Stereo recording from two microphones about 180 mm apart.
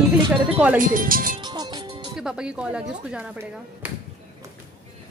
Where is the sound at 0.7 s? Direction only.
50° right (ahead or behind).